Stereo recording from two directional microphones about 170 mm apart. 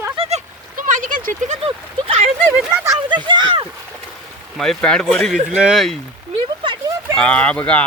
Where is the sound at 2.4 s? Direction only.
10° right (ahead or behind); by 3.7 s 30° right (ahead or behind).